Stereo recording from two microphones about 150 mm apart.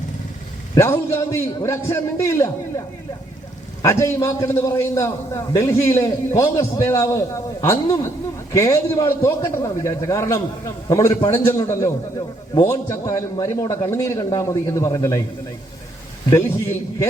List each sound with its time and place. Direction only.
0.8 s a man's voice: 15° left (ahead or behind)
3.8 s a man's voice: 20° left (ahead or behind)
16.3 s a man's voice: 20° left (ahead or behind)